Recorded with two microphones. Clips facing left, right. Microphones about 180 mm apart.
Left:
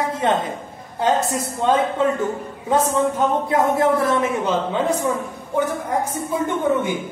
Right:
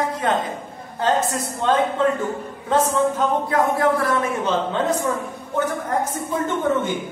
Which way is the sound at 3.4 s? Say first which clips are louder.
Left 2 dB; 25° left (ahead or behind).